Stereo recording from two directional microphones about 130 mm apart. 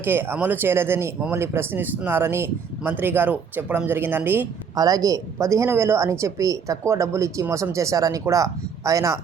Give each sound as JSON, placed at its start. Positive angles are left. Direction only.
{"t": 0.0, "sound": "speech", "side_deg": -15}
{"t": 4.7, "sound": "a woman's voice", "side_deg": -30}